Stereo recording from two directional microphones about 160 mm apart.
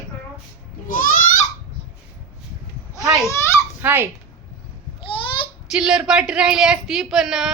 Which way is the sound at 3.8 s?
15° right (ahead or behind).